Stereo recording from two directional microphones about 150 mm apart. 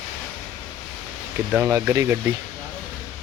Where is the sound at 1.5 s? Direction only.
15° right (ahead or behind).